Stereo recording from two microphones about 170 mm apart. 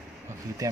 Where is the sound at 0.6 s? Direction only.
20° right (ahead or behind).